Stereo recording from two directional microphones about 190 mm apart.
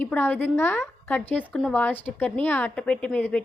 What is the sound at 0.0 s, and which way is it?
A woman's voice, 10° left (ahead or behind).